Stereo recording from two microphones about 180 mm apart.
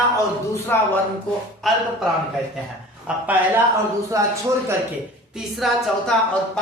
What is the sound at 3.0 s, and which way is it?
Speech, 10° right (ahead or behind).